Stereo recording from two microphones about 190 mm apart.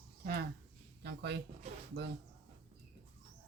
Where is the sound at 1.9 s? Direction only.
90° right.